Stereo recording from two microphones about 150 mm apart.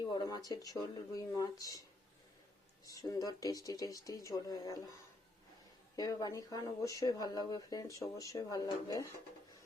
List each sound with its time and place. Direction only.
0.0 s speech: 30° left (ahead or behind)
2.8 s speech: 25° left (ahead or behind)
6.0 s speech: 25° left (ahead or behind)